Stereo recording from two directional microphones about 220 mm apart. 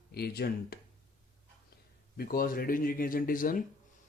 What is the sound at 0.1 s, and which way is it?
Speech, 45° left (ahead or behind).